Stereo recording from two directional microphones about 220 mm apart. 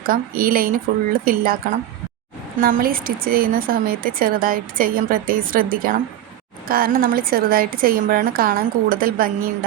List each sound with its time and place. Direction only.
0.0 s a woman's voice: 40° right (ahead or behind)
2.6 s a woman's voice: 40° right (ahead or behind)